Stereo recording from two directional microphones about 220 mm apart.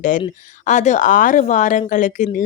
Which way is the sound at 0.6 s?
35° left (ahead or behind).